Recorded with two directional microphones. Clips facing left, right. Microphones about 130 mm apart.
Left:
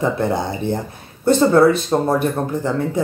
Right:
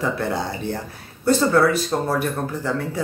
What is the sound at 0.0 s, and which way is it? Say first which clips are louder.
Speech: left 4 dB; 20° left (ahead or behind).